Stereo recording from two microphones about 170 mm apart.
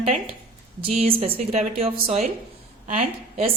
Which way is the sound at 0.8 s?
35° right (ahead or behind).